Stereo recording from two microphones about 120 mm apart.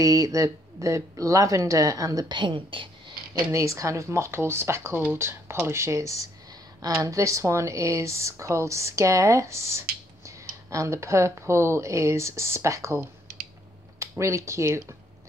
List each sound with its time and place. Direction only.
0.0 s speech: 30° right (ahead or behind); by 2.9 s 45° right (ahead or behind)
3.5 s speech: 25° right (ahead or behind)